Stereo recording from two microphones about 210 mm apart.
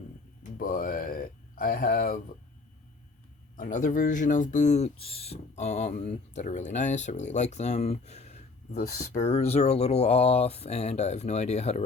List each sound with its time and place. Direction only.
0.5 s speech: 40° left (ahead or behind)
3.6 s speech: 40° left (ahead or behind)